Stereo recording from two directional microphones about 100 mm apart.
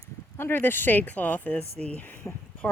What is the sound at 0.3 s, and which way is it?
Speech, 25° left (ahead or behind).